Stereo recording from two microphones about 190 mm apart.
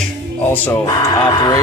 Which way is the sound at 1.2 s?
20° left (ahead or behind).